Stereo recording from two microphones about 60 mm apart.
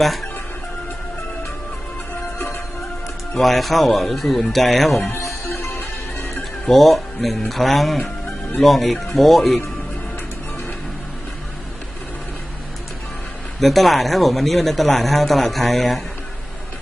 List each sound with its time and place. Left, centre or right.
0.0 s speech: centre
3.3 s speech: centre
5.1 s music: left
6.7 s speech: centre
13.6 s speech: centre